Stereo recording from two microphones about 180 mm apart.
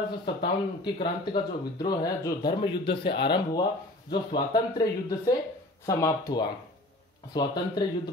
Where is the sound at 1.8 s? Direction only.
20° left (ahead or behind).